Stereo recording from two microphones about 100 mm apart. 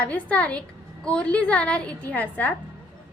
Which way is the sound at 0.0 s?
15° left (ahead or behind).